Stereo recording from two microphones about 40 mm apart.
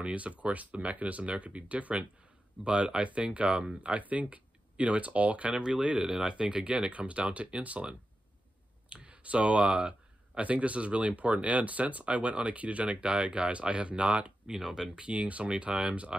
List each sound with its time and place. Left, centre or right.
0.0 s speech: right
3.9 s speech: right
14.6 s speech: centre
15.0 s speech: right